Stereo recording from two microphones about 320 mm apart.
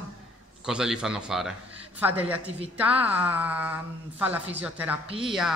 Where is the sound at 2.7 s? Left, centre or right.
Centre.